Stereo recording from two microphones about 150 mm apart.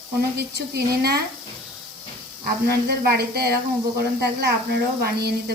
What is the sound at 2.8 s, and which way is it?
A woman's voice, 90° right.